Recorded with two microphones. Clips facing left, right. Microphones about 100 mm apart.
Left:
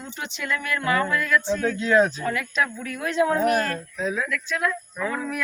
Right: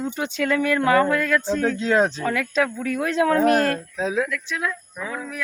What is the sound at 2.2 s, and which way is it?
Speech, 80° right.